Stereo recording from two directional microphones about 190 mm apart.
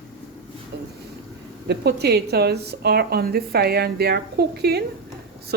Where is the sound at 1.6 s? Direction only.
60° right (ahead or behind).